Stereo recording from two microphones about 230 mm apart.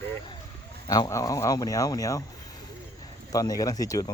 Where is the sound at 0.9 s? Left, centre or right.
Centre.